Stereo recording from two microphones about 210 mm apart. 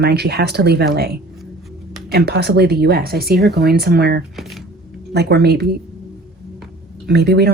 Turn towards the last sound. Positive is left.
turn(degrees=-50)  # may be behind; listen again after turning